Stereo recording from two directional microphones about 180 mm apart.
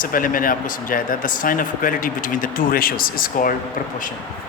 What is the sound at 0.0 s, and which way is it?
Speech, 50° left (ahead or behind).